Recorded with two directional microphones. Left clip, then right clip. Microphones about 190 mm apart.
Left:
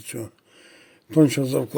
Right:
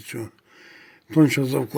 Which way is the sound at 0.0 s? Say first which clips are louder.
Right 1 dB; 5° right (ahead or behind).